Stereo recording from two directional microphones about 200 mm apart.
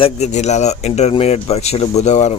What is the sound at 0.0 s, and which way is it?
Speech, 35° left (ahead or behind).